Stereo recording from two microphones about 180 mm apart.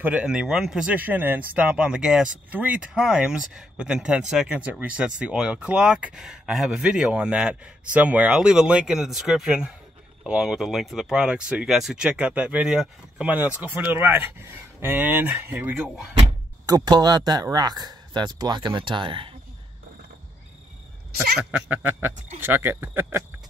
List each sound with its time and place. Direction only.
0.0 s speech: 5° right (ahead or behind)
16.6 s speech: 25° right (ahead or behind)
21.4 s speech: 5° right (ahead or behind)